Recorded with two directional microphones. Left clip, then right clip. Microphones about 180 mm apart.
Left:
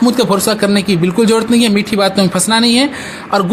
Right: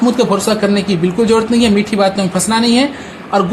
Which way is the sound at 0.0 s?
30° left (ahead or behind).